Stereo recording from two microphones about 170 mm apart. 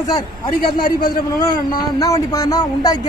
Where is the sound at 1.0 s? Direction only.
25° left (ahead or behind).